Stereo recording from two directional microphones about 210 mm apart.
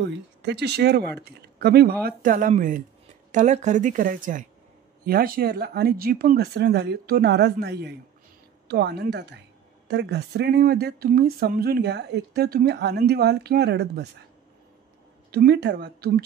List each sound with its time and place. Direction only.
0.0 s a woman's voice: 55° right (ahead or behind)
15.3 s speech: 50° right (ahead or behind)